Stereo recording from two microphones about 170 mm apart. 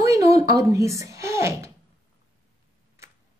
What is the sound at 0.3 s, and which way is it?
A woman's voice, 20° right (ahead or behind).